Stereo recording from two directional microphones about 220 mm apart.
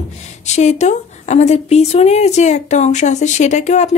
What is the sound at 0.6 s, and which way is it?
A woman's voice, 30° left (ahead or behind).